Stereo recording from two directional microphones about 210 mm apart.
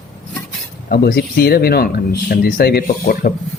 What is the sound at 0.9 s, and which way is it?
Speech, 50° left (ahead or behind).